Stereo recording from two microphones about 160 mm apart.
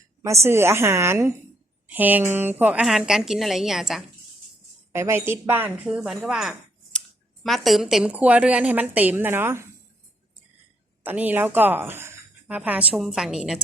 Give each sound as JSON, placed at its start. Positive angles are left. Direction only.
{"t": 0.4, "sound": "a woman's voice", "side_deg": -15}
{"t": 4.9, "sound": "a woman's voice", "side_deg": -15}
{"t": 11.0, "sound": "a woman's voice", "side_deg": -10}